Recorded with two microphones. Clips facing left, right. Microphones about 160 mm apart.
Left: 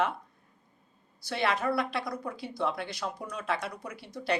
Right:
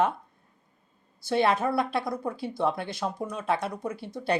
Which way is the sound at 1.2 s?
25° right (ahead or behind).